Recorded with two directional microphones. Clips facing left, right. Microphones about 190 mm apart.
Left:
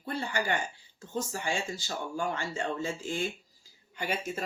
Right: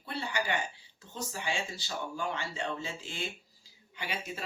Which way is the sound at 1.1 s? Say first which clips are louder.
Left 4 dB; 45° left (ahead or behind).